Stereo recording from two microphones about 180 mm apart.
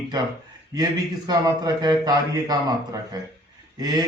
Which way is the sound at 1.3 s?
20° right (ahead or behind).